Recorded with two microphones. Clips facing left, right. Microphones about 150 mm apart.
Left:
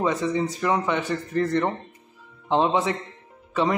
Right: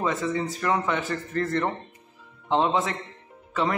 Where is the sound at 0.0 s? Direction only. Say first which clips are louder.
Left 3 dB; 20° left (ahead or behind).